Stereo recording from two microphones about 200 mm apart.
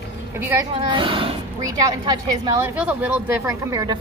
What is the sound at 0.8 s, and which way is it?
A woman's voice, 25° right (ahead or behind).